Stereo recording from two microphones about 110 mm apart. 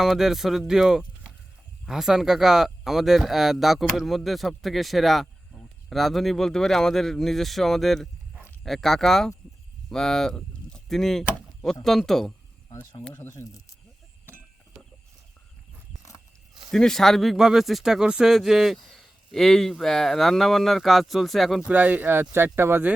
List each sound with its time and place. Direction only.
0.0 s speech: 5° right (ahead or behind)
12.7 s speech: 25° left (ahead or behind)
16.7 s speech: 5° left (ahead or behind)
21.7 s speech: 15° right (ahead or behind)